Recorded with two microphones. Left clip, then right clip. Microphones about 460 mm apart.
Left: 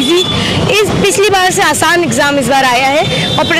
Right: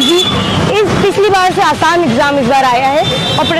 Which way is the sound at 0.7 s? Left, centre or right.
Centre.